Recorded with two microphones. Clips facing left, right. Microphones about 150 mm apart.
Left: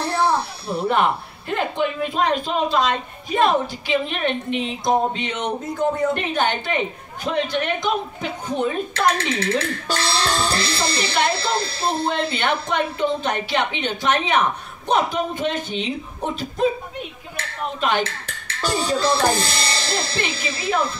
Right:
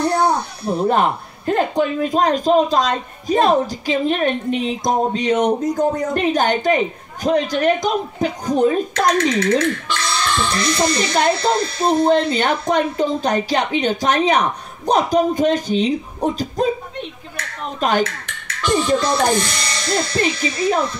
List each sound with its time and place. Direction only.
0.0 s a sound: 30° left (ahead or behind)
0.8 s speech: 40° right (ahead or behind)
9.2 s speech: 30° left (ahead or behind)
12.4 s speech: 40° right (ahead or behind)
17.7 s speech: 40° right (ahead or behind)
18.0 s speech: 30° left (ahead or behind)